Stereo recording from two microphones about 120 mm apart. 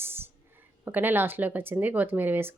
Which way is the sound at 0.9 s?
15° right (ahead or behind).